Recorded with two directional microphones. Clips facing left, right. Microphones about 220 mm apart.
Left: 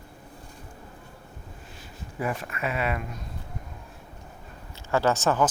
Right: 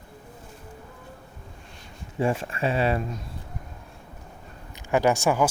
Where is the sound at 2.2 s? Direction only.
30° right (ahead or behind).